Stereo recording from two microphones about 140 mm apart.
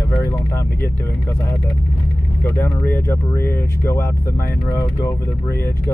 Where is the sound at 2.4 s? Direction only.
15° left (ahead or behind).